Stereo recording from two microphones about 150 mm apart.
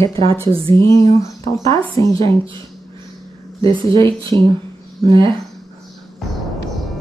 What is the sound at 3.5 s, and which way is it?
Speech, 35° right (ahead or behind).